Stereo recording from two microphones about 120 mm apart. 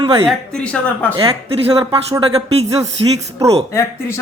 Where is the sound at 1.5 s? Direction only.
50° right (ahead or behind).